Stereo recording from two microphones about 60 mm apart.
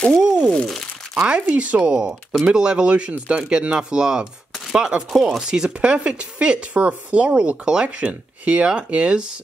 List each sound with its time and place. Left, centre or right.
0.2 s a sound: centre
0.5 s crunch: centre
1.5 s speech: right
1.8 s speech: centre